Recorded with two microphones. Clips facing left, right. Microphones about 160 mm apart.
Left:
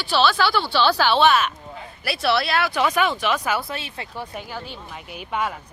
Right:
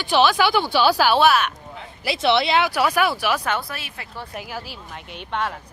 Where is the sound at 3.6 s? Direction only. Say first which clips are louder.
Left 3 dB; 25° left (ahead or behind).